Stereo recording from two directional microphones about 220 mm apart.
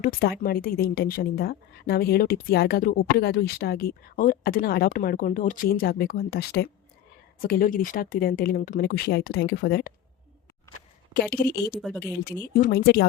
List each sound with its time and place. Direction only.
0.0 s a woman's voice: 45° left (ahead or behind)
11.1 s a woman's voice: 45° left (ahead or behind)
11.8 s speech: centre (ahead or behind)
12.5 s a woman's voice: 40° left (ahead or behind)